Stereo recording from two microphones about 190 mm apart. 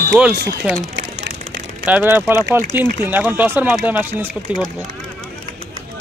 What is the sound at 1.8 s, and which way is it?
Speech, 10° right (ahead or behind).